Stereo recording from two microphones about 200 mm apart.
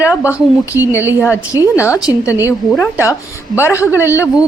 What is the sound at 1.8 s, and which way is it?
Speech, 15° left (ahead or behind).